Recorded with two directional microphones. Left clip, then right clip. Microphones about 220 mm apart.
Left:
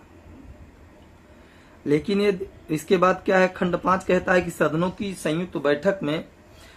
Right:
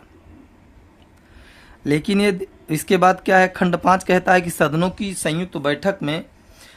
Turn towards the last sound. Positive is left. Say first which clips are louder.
# right 1 dB
turn(degrees=-50)  # may be behind; listen again after turning